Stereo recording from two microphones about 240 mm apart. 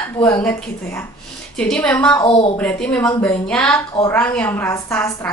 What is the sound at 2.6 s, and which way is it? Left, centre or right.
A woman's voice, centre.